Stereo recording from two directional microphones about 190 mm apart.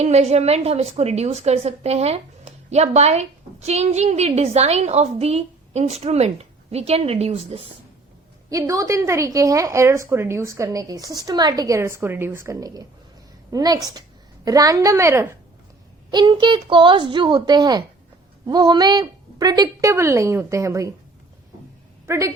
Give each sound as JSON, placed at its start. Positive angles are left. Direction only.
{"t": 0.0, "sound": "a woman's voice", "side_deg": -35}
{"t": 8.4, "sound": "speech", "side_deg": -15}
{"t": 22.0, "sound": "speech", "side_deg": -15}